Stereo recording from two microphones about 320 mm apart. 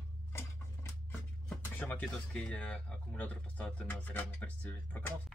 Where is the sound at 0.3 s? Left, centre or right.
Centre.